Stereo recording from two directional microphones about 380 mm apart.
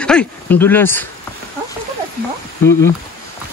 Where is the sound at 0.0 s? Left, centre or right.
Centre.